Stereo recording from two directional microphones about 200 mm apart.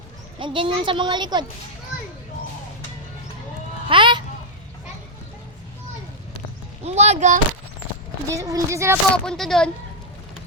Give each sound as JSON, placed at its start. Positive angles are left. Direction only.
{"t": 0.3, "sound": "a child's voice", "side_deg": -25}
{"t": 3.8, "sound": "a child's voice", "side_deg": -25}
{"t": 6.8, "sound": "speech", "side_deg": -35}
{"t": 8.3, "sound": "speech", "side_deg": -15}
{"t": 9.1, "sound": "speech", "side_deg": 5}